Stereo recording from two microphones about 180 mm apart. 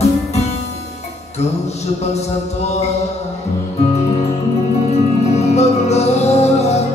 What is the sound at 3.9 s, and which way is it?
Music, 35° left (ahead or behind).